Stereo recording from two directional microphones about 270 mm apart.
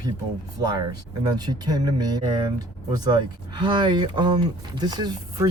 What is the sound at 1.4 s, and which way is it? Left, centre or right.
Speech, centre.